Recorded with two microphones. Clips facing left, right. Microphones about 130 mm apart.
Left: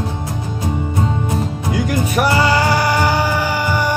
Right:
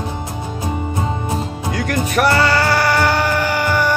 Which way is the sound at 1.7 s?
10° left (ahead or behind).